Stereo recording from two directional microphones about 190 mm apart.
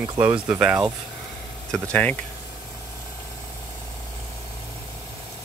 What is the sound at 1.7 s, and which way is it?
Speech, 5° left (ahead or behind).